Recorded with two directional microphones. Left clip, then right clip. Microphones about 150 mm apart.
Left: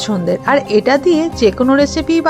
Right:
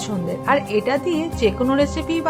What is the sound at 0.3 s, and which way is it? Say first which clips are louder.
Speech: left 6 dB; 50° left (ahead or behind).